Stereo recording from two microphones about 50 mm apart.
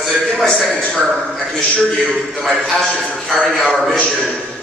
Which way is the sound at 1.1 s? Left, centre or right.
Centre.